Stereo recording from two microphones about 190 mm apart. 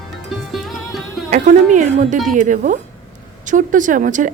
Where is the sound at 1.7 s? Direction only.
40° right (ahead or behind).